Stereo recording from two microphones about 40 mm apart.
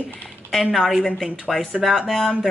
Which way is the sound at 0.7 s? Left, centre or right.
Centre.